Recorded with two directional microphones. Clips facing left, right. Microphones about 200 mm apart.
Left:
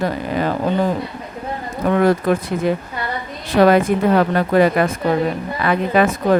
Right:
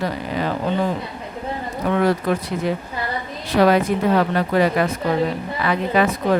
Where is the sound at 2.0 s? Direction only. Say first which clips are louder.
Left 4 dB; 50° left (ahead or behind).